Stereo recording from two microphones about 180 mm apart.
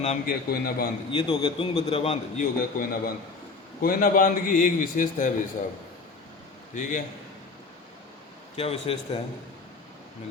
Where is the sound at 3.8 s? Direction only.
50° left (ahead or behind).